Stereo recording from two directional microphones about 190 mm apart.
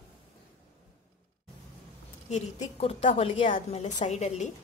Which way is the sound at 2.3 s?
35° left (ahead or behind).